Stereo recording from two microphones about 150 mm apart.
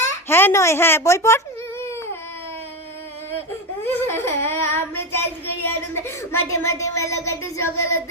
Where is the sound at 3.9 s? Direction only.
15° left (ahead or behind).